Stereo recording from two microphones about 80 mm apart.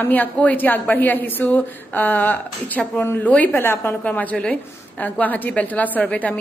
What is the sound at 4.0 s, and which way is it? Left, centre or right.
A woman's voice, centre.